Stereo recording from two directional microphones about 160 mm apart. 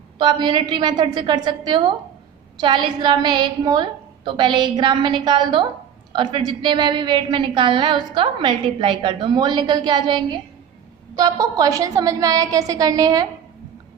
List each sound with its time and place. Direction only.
0.2 s a woman's voice: 30° right (ahead or behind)